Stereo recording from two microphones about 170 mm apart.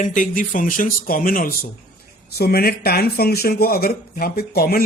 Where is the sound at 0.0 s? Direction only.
50° left (ahead or behind).